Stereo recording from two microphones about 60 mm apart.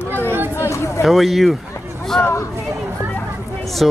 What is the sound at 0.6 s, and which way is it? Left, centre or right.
Chatter, left.